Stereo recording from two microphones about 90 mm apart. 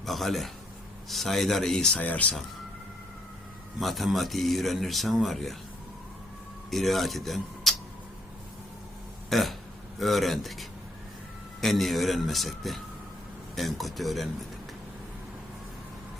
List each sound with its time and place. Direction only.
0.0 s speech: centre (ahead or behind)
3.8 s speech: centre (ahead or behind)
6.7 s speech: centre (ahead or behind)
9.3 s burping: centre (ahead or behind)
10.0 s speech: centre (ahead or behind)